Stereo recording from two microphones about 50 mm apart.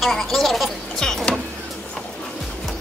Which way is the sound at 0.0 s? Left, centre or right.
Centre.